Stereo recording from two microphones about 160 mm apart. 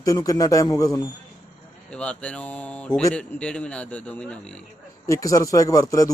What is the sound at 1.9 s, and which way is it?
A man's voice, 5° left (ahead or behind).